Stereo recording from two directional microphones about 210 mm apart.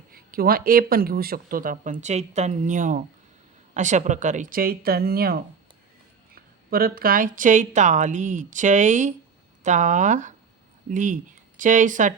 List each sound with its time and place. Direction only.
0.1 s a woman's voice: 45° right (ahead or behind)